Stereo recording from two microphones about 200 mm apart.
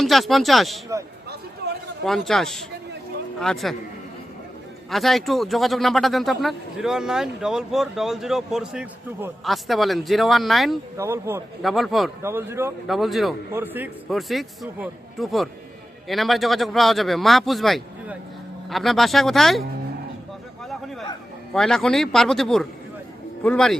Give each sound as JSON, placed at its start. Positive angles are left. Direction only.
{"t": 0.0, "sound": "a man's voice", "side_deg": 0}
{"t": 2.0, "sound": "a man's voice", "side_deg": 0}
{"t": 4.9, "sound": "a man's voice", "side_deg": 0}
{"t": 10.9, "sound": "speech", "side_deg": -15}
{"t": 11.6, "sound": "a man's voice", "side_deg": 0}
{"t": 12.2, "sound": "speech", "side_deg": -10}
{"t": 12.9, "sound": "a man's voice", "side_deg": 0}
{"t": 13.5, "sound": "a man's voice", "side_deg": -10}
{"t": 21.5, "sound": "a man's voice", "side_deg": 0}